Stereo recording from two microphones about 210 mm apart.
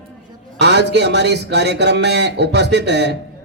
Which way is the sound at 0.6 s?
55° right (ahead or behind).